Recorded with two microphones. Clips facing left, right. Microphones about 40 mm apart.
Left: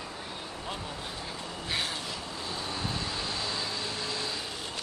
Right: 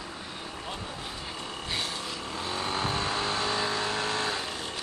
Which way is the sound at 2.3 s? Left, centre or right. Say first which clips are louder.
Right 7 dB; right.